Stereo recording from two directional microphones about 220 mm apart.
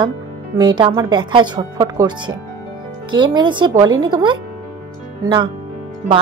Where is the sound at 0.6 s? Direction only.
20° right (ahead or behind).